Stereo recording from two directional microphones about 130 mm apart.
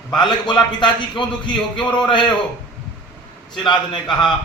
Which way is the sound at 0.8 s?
35° left (ahead or behind).